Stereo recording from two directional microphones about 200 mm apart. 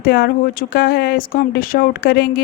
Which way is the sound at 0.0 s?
50° left (ahead or behind).